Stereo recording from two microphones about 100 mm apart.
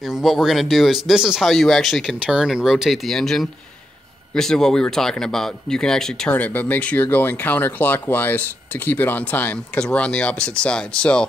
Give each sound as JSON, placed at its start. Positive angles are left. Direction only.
{"t": 0.1, "sound": "speech", "side_deg": 0}
{"t": 6.3, "sound": "speech", "side_deg": 15}